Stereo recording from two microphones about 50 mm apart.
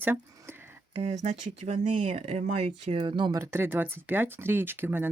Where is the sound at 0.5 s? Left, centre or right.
Right.